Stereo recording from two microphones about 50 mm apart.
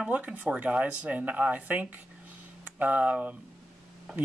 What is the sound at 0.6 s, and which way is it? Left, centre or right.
Speech, right.